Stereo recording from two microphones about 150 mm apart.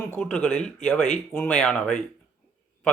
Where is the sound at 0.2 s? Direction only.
5° left (ahead or behind).